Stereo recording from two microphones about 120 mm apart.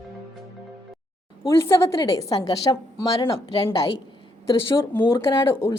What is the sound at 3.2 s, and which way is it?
Speech, 45° left (ahead or behind).